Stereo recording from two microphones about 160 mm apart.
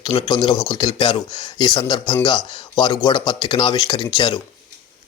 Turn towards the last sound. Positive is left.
turn(degrees=25)  # may be behind; listen again after turning